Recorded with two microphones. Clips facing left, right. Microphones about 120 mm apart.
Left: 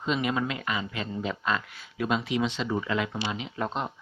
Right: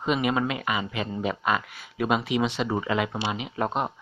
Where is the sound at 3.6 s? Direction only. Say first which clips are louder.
Right 4 dB; 50° right (ahead or behind).